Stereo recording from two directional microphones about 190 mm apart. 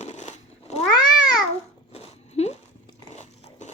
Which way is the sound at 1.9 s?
35° left (ahead or behind).